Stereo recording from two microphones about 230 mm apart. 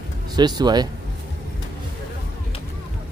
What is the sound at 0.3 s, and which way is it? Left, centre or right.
Speech, centre.